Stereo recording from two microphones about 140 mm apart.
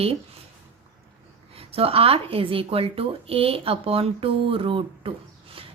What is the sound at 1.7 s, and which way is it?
A woman's voice, 45° right (ahead or behind).